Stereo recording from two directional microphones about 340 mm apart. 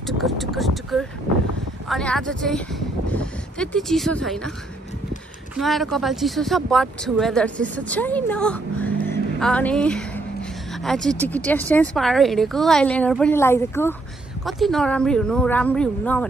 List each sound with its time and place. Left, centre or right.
0.0 s speech: centre
5.6 s speech: centre